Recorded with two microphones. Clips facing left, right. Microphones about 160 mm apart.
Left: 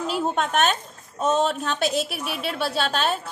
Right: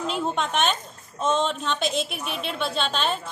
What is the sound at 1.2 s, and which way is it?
Speech, 40° left (ahead or behind).